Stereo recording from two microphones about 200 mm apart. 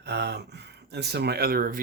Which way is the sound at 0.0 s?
55° right (ahead or behind).